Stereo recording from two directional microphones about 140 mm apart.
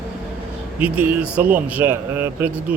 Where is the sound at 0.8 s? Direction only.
10° right (ahead or behind).